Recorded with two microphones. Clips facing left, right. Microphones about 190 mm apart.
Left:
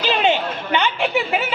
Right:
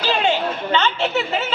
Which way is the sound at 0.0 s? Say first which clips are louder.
Left 1 dB; 20° left (ahead or behind).